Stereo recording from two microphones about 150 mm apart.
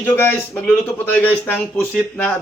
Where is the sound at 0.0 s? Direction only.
15° left (ahead or behind).